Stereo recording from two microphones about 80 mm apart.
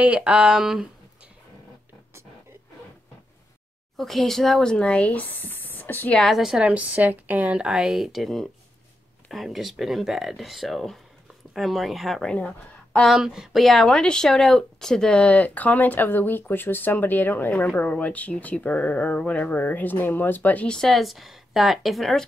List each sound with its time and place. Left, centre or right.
0.0 s speech: centre
3.9 s speech: centre; by 6.1 s left
6.3 s speech: centre
6.7 s speech: right; by 12.3 s centre
12.3 s speech: centre
13.0 s speech: centre